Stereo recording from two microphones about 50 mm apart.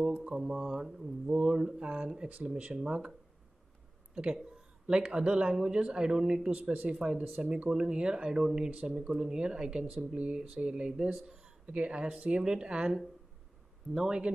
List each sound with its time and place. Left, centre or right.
0.4 s speech: centre
4.8 s speech: centre
13.9 s speech: centre